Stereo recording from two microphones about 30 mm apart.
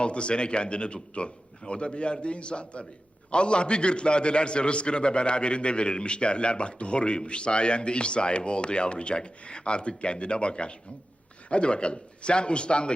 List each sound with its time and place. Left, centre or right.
0.0 s a man's voice: left